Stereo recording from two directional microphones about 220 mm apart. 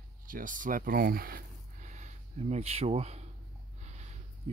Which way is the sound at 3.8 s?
30° right (ahead or behind).